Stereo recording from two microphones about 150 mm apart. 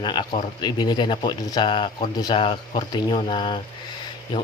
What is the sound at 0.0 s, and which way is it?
A man's voice, 30° left (ahead or behind).